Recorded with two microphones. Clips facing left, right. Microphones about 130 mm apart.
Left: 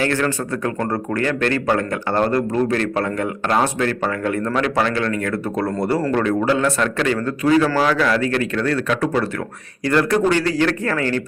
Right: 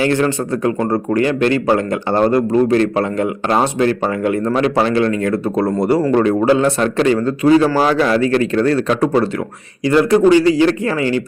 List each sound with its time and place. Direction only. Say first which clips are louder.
0.0 s a man's voice: right 5 dB; 20° right (ahead or behind)
9.8 s speech: right 6 dB; 15° right (ahead or behind)